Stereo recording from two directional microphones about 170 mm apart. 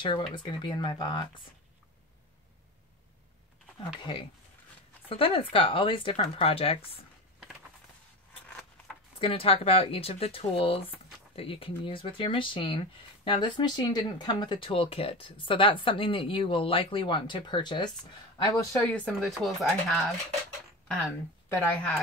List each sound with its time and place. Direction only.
0.0 s speech: 25° left (ahead or behind)
4.0 s speech: 30° left (ahead or behind)
8.5 s a sound: 5° left (ahead or behind)
9.2 s speech: 35° left (ahead or behind); by 18.9 s 15° left (ahead or behind)
19.0 s speech: centre (ahead or behind)
21.5 s speech: 10° left (ahead or behind)